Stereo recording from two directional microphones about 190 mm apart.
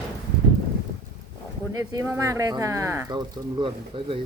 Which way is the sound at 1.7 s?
20° right (ahead or behind).